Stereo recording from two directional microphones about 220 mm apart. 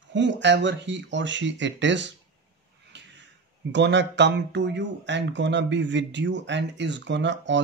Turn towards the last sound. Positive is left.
turn(degrees=-55)  # may be behind; listen again after turning